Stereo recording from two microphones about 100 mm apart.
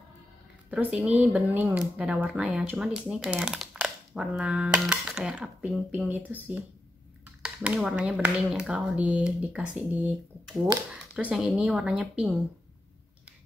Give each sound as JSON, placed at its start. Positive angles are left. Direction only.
{"t": 0.7, "sound": "speech", "side_deg": -15}
{"t": 10.9, "sound": "a sound", "side_deg": -15}
{"t": 11.3, "sound": "a woman's voice", "side_deg": -5}